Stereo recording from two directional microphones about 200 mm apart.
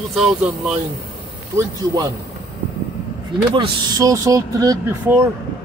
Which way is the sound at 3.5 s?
20° right (ahead or behind).